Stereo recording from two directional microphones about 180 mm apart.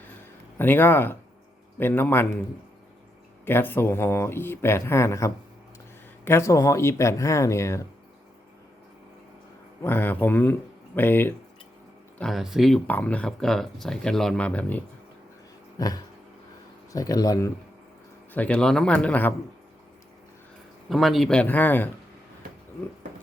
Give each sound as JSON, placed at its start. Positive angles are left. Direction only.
{"t": 0.6, "sound": "speech", "side_deg": 10}
{"t": 3.4, "sound": "speech", "side_deg": 10}
{"t": 9.8, "sound": "speech", "side_deg": 10}
{"t": 12.2, "sound": "speech", "side_deg": 0}
{"t": 16.9, "sound": "speech", "side_deg": 20}
{"t": 18.3, "sound": "speech", "side_deg": 5}
{"t": 20.9, "sound": "speech", "side_deg": 0}